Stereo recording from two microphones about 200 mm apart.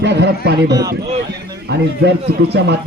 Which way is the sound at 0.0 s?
60° right (ahead or behind).